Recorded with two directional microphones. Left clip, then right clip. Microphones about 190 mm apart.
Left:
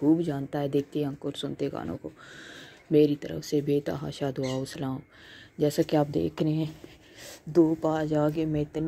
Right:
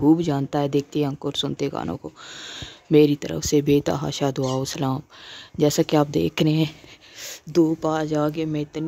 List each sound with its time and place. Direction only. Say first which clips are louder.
0.0 s speech: right 6 dB; 20° right (ahead or behind)